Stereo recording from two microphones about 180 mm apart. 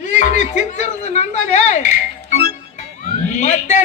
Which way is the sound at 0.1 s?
40° left (ahead or behind).